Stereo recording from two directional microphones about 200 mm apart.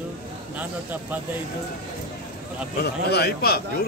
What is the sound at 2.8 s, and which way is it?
A man's voice, 55° left (ahead or behind).